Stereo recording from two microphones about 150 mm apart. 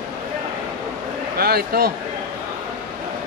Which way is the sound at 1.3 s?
90° right.